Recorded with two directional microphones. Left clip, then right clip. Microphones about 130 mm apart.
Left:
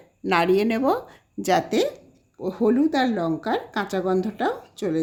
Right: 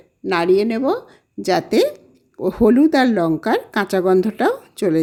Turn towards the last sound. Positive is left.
turn(degrees=-50)  # may be behind; listen again after turning